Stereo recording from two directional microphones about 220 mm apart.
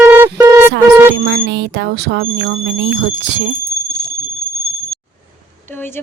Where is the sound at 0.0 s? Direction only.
10° right (ahead or behind).